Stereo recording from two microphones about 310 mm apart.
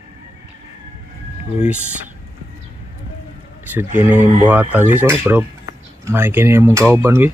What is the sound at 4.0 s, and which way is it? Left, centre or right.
Speech, centre.